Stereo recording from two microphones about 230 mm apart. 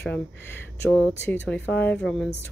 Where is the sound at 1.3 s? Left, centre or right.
Centre.